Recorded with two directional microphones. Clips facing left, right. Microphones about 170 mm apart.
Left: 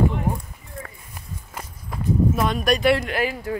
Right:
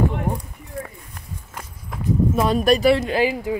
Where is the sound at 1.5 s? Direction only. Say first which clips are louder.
Left 1 dB; centre (ahead or behind).